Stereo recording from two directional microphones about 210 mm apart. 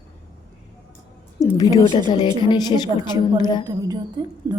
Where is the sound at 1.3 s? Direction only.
15° left (ahead or behind).